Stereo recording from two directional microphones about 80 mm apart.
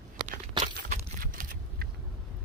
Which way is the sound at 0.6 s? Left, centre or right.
Right.